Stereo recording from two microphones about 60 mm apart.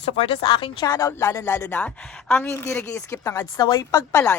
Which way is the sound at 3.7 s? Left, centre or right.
Left.